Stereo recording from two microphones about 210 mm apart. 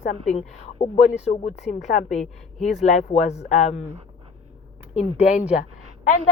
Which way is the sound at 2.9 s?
30° left (ahead or behind).